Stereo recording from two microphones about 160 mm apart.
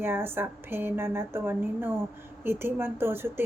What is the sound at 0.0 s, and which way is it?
A woman's voice, 15° right (ahead or behind).